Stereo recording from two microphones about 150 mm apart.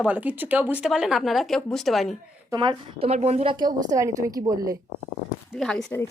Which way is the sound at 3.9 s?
20° right (ahead or behind).